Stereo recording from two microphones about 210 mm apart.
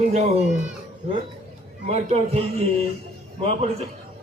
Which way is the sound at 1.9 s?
30° right (ahead or behind).